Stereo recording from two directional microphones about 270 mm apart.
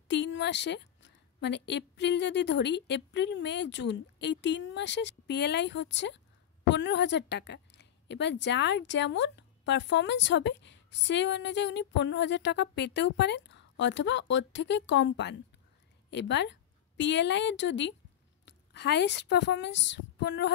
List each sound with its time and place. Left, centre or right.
0.1 s a woman's voice: left